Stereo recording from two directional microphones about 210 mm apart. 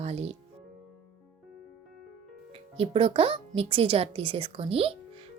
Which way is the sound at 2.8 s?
25° right (ahead or behind).